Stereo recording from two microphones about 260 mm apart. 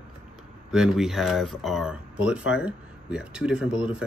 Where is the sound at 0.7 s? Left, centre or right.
Centre.